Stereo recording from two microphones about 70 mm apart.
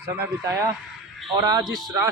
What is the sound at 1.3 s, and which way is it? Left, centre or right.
Speech, right.